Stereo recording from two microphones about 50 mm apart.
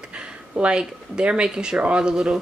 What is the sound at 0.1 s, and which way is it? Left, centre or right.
Speech, right.